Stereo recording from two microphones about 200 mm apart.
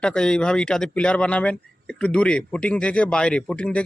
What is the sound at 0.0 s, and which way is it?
Speech, 5° left (ahead or behind).